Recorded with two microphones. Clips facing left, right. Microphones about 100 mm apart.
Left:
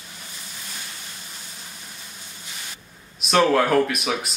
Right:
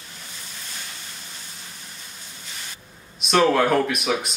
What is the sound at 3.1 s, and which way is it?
Speech, centre (ahead or behind).